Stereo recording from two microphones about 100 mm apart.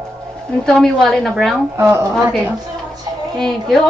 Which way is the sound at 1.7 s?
25° right (ahead or behind).